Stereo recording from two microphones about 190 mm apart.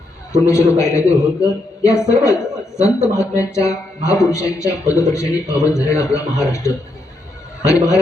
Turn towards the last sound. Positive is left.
turn(degrees=15)  # may be behind; listen again after turning